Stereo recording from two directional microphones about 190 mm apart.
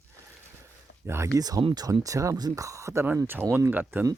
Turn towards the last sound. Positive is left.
turn(degrees=-10)  # may be behind; listen again after turning